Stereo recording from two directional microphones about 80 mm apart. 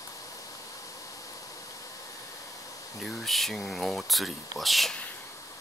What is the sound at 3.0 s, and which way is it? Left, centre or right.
Speech, centre.